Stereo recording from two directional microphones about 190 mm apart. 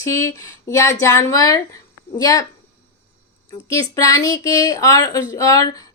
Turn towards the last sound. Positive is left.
turn(degrees=20)  # may be behind; listen again after turning